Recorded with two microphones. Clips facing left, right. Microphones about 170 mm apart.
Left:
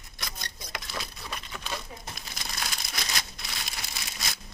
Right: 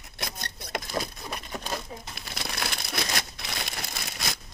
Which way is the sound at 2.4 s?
60° right (ahead or behind).